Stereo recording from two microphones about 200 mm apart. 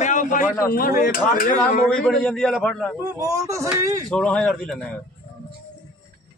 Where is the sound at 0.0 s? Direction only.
40° left (ahead or behind).